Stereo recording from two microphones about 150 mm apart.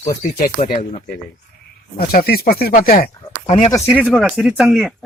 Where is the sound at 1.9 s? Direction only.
80° left.